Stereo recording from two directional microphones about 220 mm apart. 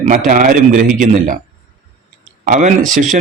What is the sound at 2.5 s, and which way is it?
Speech, 35° right (ahead or behind).